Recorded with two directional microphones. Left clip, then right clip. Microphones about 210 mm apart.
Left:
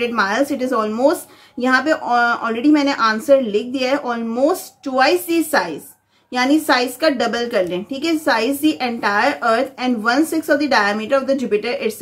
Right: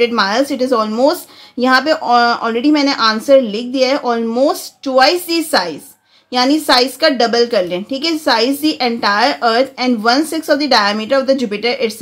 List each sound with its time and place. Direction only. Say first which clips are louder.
0.0 s a woman's voice: right 4 dB; 40° right (ahead or behind)